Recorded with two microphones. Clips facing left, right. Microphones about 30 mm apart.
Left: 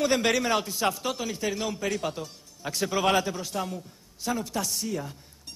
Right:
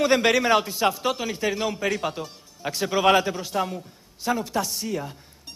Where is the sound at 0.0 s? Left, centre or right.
Centre.